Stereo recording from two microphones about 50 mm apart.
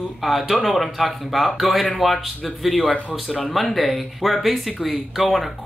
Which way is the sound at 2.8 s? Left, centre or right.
Left.